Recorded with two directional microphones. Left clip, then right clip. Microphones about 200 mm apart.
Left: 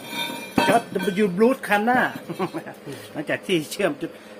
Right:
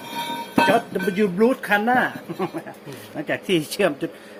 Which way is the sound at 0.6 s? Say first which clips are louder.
Right 1 dB; 15° right (ahead or behind).